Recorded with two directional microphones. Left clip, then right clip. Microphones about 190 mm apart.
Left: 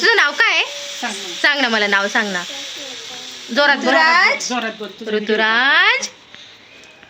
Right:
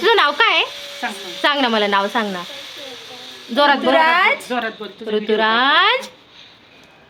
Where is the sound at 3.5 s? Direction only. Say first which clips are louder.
Even; 5° right (ahead or behind).